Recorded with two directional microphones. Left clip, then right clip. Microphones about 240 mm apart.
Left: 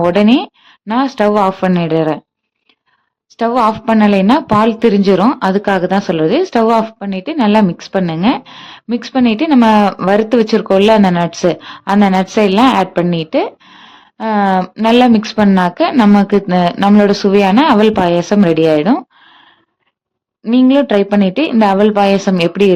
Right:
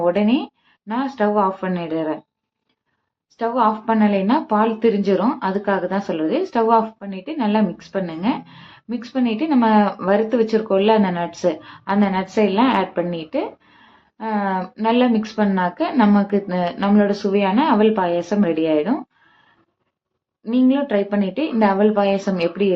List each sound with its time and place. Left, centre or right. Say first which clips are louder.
0.0 s a woman's voice: left 7 dB; left
3.3 s a woman's voice: left 6 dB; left
20.4 s a woman's voice: left 8 dB; left